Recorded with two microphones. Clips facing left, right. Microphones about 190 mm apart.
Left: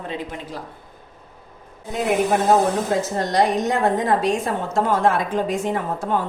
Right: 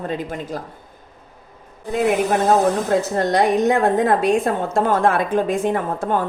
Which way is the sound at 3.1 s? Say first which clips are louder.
Right 2 dB; 55° right (ahead or behind).